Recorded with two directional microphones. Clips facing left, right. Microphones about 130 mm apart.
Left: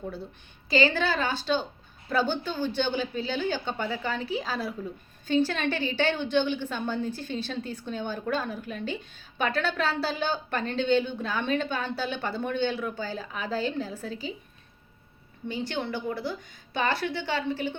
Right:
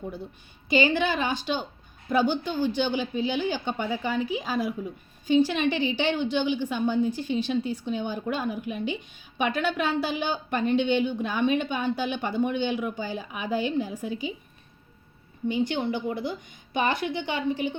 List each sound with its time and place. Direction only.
0.7 s a woman's voice: 15° right (ahead or behind)
15.4 s a woman's voice: 15° right (ahead or behind)